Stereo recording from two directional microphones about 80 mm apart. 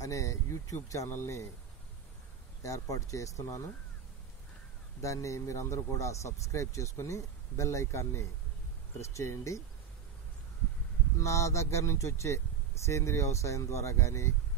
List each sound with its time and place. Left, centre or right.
0.0 s speech: left
2.6 s speech: left
5.0 s speech: left
11.1 s speech: left